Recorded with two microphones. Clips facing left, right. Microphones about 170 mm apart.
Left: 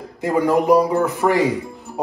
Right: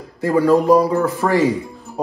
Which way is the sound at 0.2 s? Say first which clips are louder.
Right 3 dB; 20° left (ahead or behind).